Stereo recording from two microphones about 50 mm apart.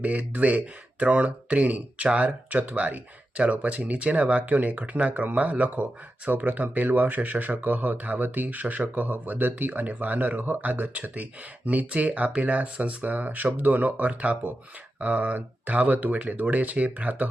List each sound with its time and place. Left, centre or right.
0.0 s speech: right